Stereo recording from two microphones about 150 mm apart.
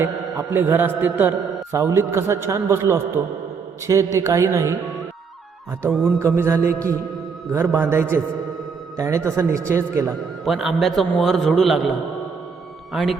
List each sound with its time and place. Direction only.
0.0 s a man's voice: 15° right (ahead or behind)
6.1 s a man's voice: 20° right (ahead or behind)
10.4 s a man's voice: centre (ahead or behind)